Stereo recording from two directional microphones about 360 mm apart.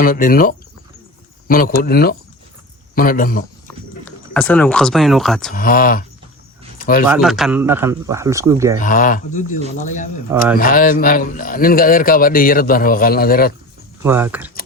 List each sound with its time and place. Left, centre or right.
0.0 s a man's voice: left
4.0 s speech: centre
5.5 s a man's voice: left
6.7 s a sound: left
7.1 s speech: centre
8.8 s a man's voice: left
14.0 s speech: centre